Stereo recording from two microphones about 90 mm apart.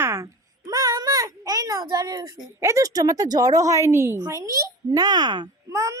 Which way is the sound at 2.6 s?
35° right (ahead or behind).